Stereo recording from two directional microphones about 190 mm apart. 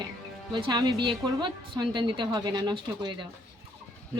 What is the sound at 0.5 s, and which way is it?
A woman's voice, 25° right (ahead or behind).